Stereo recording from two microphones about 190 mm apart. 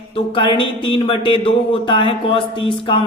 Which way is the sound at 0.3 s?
25° left (ahead or behind).